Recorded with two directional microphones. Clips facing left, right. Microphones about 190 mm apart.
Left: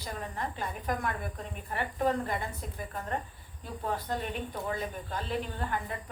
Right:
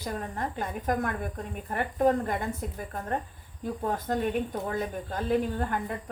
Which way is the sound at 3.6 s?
45° right (ahead or behind).